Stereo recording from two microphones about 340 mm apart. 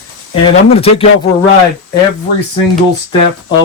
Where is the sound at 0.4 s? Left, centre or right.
Centre.